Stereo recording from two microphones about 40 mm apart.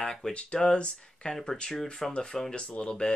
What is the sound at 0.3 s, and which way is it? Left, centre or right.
Speech, left.